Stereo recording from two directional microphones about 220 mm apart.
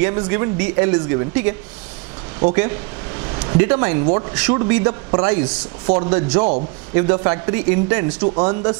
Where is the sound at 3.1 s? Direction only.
15° right (ahead or behind).